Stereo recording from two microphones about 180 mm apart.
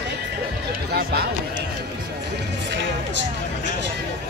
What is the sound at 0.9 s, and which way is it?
Speech, 60° right (ahead or behind).